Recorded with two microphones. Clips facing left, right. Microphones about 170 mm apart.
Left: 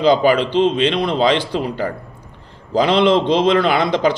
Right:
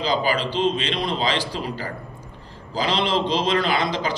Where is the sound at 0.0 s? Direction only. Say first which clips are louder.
Left 9 dB; 60° left (ahead or behind).